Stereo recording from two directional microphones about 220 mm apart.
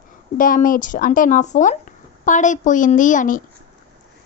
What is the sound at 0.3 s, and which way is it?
Speech, 40° left (ahead or behind).